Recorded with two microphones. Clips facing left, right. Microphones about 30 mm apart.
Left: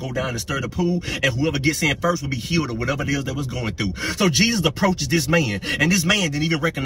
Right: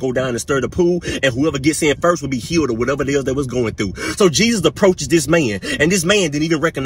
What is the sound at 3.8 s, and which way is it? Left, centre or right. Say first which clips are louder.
Speech: right 4 dB; right.